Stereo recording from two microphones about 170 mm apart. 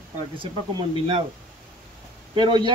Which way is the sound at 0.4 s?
30° right (ahead or behind).